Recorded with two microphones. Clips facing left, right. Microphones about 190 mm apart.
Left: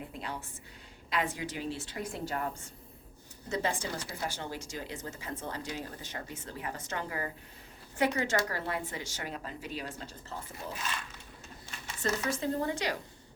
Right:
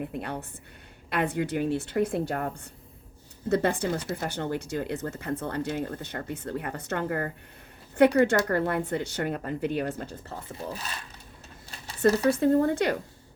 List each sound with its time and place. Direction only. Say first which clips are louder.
0.0 s speech: right 7 dB; 60° right (ahead or behind)
12.3 s speech: right 10 dB; 55° right (ahead or behind)